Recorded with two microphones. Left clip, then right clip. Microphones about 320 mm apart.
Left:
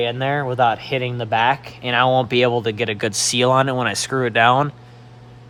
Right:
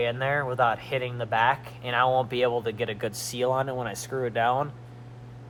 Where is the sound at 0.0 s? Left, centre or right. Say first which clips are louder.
Left 5 dB; left.